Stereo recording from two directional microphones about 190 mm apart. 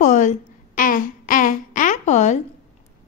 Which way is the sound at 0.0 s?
40° left (ahead or behind).